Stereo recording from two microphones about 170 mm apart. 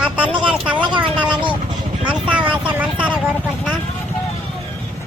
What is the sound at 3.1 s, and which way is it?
Speech, 5° right (ahead or behind).